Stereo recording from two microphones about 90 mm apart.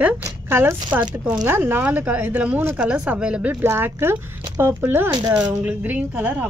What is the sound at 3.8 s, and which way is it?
A woman's voice, 25° right (ahead or behind).